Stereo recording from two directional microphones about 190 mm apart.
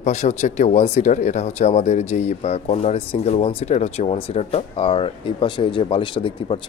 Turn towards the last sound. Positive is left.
turn(degrees=25)  # may be behind; listen again after turning